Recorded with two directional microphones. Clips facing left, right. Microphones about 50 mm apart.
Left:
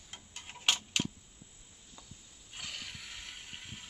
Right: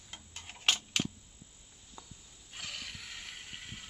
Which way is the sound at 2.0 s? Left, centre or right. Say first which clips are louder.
Right 4 dB; centre.